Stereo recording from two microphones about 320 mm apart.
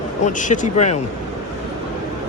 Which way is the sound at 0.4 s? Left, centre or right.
Left.